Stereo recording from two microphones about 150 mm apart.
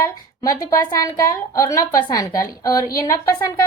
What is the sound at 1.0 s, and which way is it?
A woman's voice, 20° left (ahead or behind).